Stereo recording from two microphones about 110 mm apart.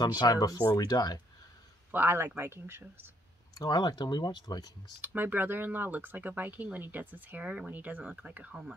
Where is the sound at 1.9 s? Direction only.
20° right (ahead or behind).